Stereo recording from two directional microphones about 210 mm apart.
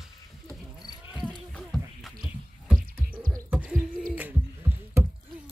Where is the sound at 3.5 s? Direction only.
5° right (ahead or behind).